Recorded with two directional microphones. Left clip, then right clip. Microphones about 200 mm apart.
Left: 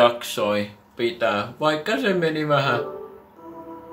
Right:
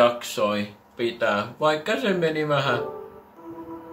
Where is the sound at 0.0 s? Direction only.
5° left (ahead or behind).